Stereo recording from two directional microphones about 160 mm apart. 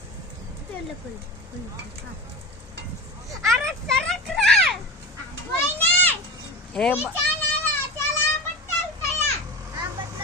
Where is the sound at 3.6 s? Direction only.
5° left (ahead or behind).